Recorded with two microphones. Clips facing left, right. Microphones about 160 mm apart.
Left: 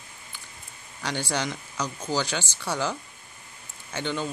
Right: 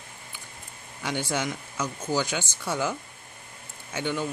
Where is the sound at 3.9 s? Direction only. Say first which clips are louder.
Right 1 dB; 10° right (ahead or behind).